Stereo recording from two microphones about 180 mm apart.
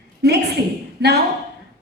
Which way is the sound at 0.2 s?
65° right (ahead or behind).